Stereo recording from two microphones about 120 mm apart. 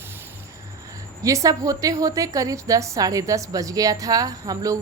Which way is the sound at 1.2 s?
25° right (ahead or behind).